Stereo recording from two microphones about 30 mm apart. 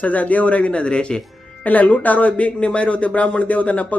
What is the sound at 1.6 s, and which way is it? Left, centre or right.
Speech, left.